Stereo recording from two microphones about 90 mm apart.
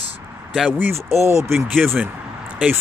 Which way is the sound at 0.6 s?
20° right (ahead or behind).